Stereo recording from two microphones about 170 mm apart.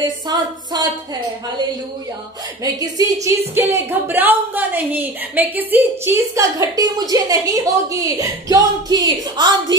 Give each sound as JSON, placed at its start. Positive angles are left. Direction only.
{"t": 0.0, "sound": "speech", "side_deg": -25}
{"t": 2.6, "sound": "speech", "side_deg": -20}